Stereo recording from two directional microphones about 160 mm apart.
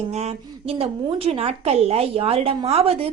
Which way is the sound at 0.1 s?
45° right (ahead or behind).